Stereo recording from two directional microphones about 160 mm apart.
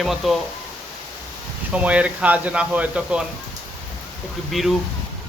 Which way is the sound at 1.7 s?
10° right (ahead or behind).